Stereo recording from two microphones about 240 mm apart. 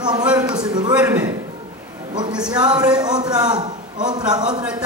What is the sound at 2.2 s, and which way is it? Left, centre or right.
A man's voice, centre.